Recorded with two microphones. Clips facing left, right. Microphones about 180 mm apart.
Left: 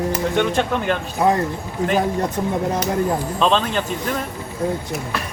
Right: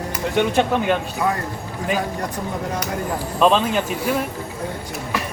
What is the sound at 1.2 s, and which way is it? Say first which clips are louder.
Speech: left 7 dB; 25° left (ahead or behind).